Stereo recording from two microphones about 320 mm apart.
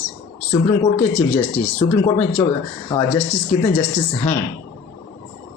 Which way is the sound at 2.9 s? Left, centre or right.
Centre.